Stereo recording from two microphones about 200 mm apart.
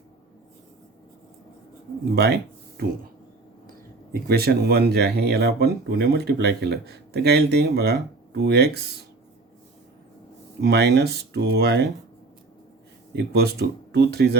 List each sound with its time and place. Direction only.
2.1 s speech: 55° right (ahead or behind)
4.1 s speech: 50° right (ahead or behind)
10.6 s speech: 55° right (ahead or behind)
13.1 s speech: 55° right (ahead or behind)